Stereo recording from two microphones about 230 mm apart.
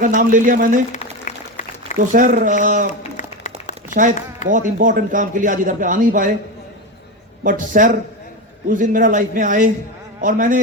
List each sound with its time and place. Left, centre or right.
0.0 s a man's voice: right
0.9 s applause: left
2.1 s a man's voice: right
3.0 s a sound: left
4.4 s a man's voice: right
7.4 s a man's voice: right